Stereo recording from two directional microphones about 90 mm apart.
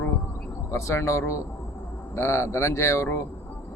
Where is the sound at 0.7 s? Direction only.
30° left (ahead or behind).